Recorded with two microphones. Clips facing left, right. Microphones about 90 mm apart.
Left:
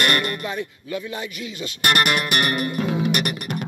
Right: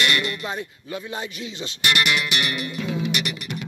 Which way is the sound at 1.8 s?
45° left (ahead or behind).